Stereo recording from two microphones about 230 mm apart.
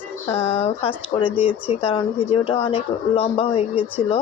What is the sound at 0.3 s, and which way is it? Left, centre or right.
Speech, left.